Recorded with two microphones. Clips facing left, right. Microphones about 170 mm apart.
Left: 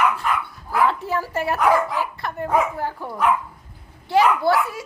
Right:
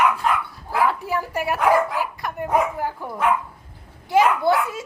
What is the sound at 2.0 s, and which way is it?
A woman's voice, 15° right (ahead or behind).